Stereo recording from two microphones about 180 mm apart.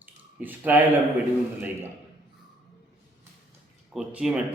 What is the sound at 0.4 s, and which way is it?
Speech, 10° right (ahead or behind).